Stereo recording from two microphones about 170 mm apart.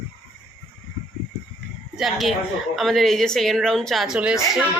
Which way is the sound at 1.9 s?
Centre (ahead or behind).